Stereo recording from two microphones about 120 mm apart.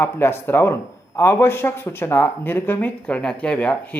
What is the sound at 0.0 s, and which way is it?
Speech, 20° left (ahead or behind).